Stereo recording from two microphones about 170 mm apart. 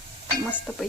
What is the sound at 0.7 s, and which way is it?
Speech, centre (ahead or behind).